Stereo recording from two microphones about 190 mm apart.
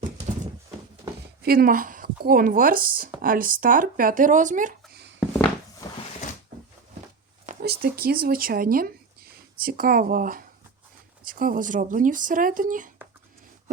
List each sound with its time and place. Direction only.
1.4 s speech: 50° right (ahead or behind)
7.6 s speech: 55° right (ahead or behind)